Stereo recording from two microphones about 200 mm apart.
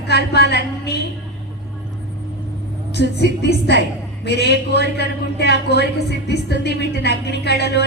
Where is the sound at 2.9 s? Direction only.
55° left (ahead or behind).